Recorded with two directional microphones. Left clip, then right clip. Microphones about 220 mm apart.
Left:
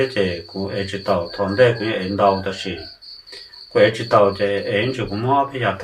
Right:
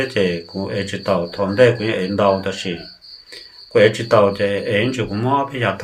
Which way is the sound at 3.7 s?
45° right (ahead or behind).